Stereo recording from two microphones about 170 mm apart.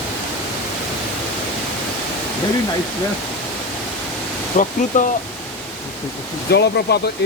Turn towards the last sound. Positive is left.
turn(degrees=70)  # may be behind; listen again after turning